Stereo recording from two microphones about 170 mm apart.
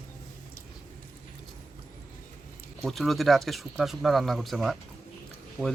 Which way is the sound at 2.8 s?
Centre (ahead or behind).